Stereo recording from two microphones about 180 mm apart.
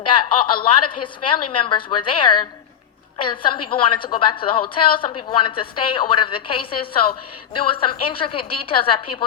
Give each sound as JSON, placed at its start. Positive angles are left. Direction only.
{"t": 0.0, "sound": "a woman's voice", "side_deg": 25}